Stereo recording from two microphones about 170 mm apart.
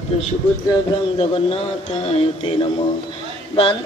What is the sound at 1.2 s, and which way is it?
Speech, 35° left (ahead or behind).